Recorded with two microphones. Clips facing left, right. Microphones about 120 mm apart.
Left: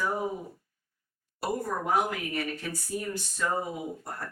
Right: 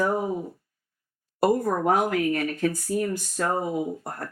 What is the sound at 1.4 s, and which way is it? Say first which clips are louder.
Speech: right 9 dB; 50° right (ahead or behind).